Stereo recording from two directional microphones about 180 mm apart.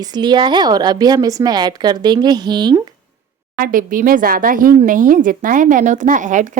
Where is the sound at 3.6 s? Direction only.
50° right (ahead or behind).